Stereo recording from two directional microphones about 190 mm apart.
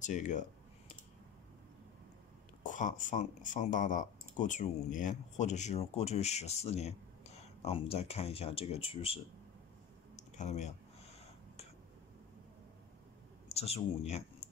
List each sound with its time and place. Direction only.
0.0 s speech: 40° left (ahead or behind)
2.6 s speech: 40° left (ahead or behind)
10.1 s a sound: 40° left (ahead or behind)
13.5 s speech: 35° left (ahead or behind)